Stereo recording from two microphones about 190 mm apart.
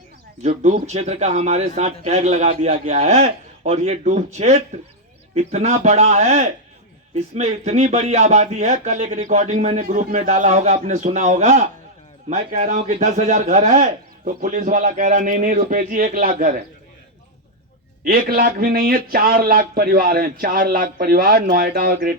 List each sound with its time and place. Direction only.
0.4 s speech: 35° right (ahead or behind)
18.0 s speech: 50° right (ahead or behind)